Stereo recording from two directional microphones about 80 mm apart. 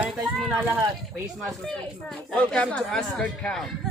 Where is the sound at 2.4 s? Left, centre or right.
Centre.